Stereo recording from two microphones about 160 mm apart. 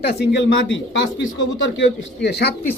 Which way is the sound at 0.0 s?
90° left.